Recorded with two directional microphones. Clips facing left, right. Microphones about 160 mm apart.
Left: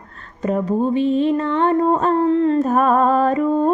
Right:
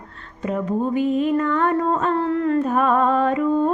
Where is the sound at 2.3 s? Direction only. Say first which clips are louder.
Left 4 dB; 25° left (ahead or behind).